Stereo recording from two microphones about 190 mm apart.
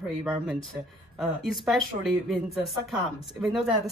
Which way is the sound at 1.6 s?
Centre (ahead or behind).